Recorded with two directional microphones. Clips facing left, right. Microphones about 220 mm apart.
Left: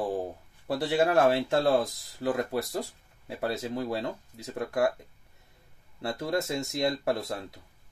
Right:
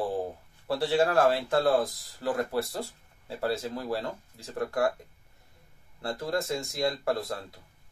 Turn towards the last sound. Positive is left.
turn(degrees=25)  # may be behind; listen again after turning